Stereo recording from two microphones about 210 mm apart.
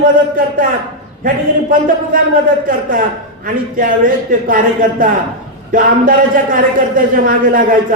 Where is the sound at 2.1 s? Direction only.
40° right (ahead or behind).